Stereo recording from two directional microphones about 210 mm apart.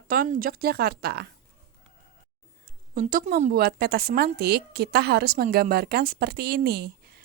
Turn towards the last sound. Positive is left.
turn(degrees=-50)  # may be behind; listen again after turning